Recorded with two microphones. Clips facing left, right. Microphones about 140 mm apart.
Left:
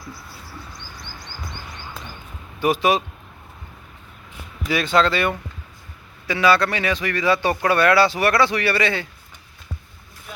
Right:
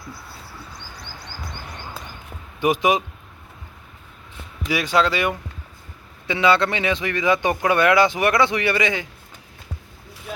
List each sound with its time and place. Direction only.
2.6 s speech: 15° right (ahead or behind)
4.7 s speech: 10° right (ahead or behind)